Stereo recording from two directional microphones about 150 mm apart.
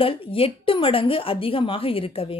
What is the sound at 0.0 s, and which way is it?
Speech, 40° left (ahead or behind).